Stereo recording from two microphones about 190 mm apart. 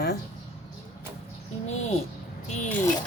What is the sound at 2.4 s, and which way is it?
Music, 35° left (ahead or behind).